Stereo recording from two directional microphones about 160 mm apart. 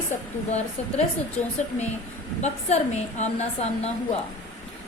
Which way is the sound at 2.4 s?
45° left (ahead or behind).